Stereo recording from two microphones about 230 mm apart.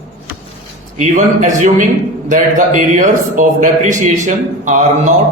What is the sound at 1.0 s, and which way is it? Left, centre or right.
Speech, right.